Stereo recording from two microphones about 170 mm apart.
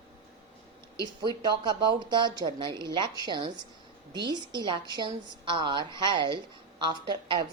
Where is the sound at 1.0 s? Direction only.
25° right (ahead or behind).